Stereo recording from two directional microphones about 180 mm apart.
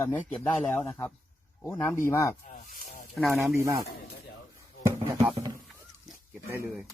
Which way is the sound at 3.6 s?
15° right (ahead or behind).